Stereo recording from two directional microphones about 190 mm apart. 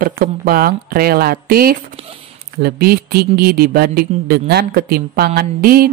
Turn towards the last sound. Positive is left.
turn(degrees=-50)  # may be behind; listen again after turning